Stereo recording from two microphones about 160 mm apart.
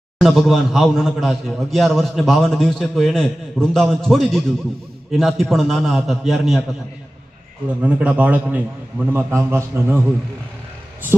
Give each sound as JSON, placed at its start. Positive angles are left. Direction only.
{"t": 0.2, "sound": "a man's voice", "side_deg": 0}
{"t": 7.8, "sound": "a man's voice", "side_deg": -10}